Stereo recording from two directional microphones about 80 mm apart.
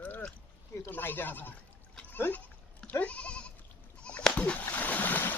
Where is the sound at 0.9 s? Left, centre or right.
Left.